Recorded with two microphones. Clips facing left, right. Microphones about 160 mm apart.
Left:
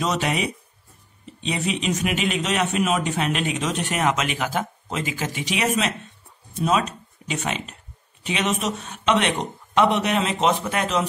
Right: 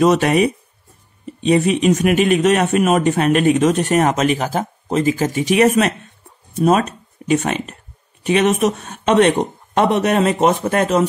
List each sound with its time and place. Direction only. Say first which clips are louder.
0.0 s a man's voice: right 10 dB; 55° right (ahead or behind)